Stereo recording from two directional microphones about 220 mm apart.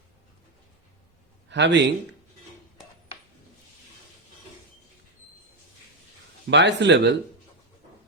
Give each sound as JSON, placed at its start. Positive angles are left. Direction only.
{"t": 1.5, "sound": "speech", "side_deg": -50}
{"t": 6.5, "sound": "speech", "side_deg": -55}